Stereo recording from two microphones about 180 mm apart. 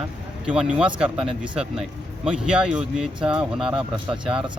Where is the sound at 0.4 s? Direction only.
5° right (ahead or behind).